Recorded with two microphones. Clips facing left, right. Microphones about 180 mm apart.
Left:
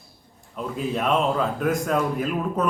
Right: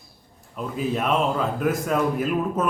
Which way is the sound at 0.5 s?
Centre (ahead or behind).